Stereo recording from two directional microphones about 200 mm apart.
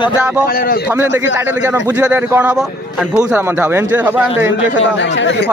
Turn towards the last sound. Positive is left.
turn(degrees=60)  # may be behind; listen again after turning